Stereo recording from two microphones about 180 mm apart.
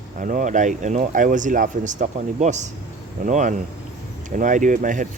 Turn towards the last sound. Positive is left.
turn(degrees=-45)  # may be behind; listen again after turning